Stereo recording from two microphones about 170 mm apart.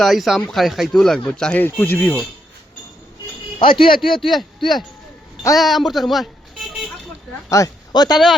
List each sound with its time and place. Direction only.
0.0 s speech: centre (ahead or behind)
3.6 s speech: 30° left (ahead or behind)
3.8 s a man's voice: 60° left (ahead or behind)
4.2 s speech: centre (ahead or behind)
5.5 s speech: centre (ahead or behind)
7.5 s speech: 20° left (ahead or behind)